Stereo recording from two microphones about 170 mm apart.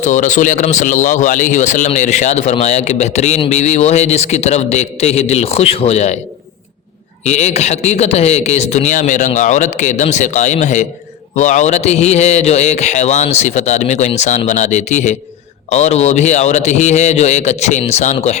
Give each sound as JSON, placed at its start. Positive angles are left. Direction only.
{"t": 0.0, "sound": "a man's voice", "side_deg": 45}
{"t": 7.3, "sound": "a man's voice", "side_deg": 40}